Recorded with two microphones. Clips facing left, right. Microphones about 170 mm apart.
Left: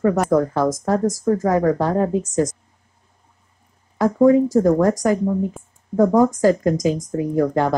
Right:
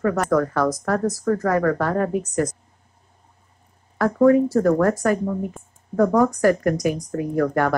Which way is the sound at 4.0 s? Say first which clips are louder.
Left 2 dB; 20° left (ahead or behind).